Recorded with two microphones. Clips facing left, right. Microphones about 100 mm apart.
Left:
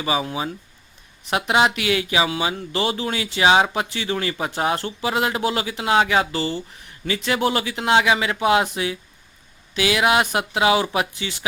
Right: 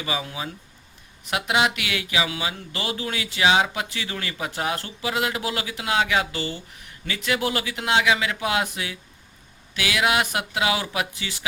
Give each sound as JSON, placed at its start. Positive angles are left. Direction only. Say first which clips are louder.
{"t": 0.0, "sound": "speech", "louder": "left 6 dB", "side_deg": 30}